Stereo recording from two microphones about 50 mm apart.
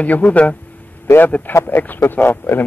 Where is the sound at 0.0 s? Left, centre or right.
Left.